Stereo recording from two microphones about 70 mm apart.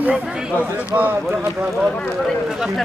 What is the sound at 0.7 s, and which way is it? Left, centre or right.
Speech, right.